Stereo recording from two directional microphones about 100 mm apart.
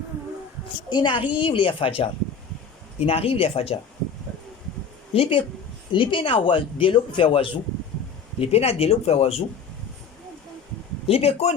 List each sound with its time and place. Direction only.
0.9 s speech: 50° left (ahead or behind); by 3.8 s 75° left (ahead or behind)
5.1 s speech: 65° left (ahead or behind)
8.4 s speech: 90° left
11.0 s speech: 85° left